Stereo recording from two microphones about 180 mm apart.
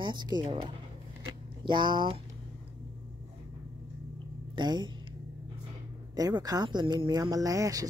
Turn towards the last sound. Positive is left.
turn(degrees=-20)  # may be behind; listen again after turning